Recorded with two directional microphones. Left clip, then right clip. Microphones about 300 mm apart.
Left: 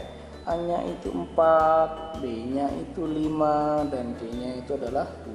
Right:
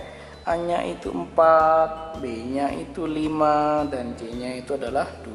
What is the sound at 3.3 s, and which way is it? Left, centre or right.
Speech, left.